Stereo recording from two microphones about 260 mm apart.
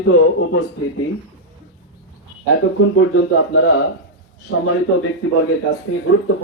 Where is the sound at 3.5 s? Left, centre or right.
Left.